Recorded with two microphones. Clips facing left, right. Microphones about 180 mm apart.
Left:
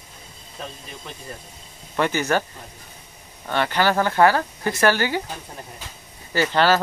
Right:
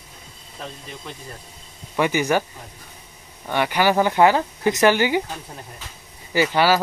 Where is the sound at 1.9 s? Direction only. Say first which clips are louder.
Right 2 dB; 15° right (ahead or behind).